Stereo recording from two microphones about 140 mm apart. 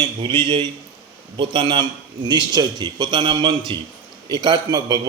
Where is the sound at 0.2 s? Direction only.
35° right (ahead or behind).